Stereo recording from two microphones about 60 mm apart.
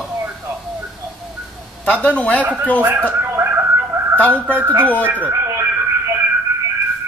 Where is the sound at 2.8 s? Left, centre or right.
Right.